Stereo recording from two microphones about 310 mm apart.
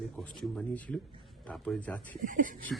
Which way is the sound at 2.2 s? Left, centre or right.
Right.